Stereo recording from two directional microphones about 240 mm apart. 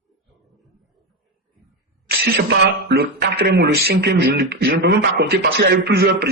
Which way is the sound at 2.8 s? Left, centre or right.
Right.